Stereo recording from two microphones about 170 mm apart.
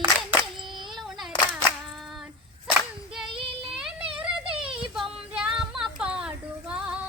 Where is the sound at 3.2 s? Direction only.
30° right (ahead or behind).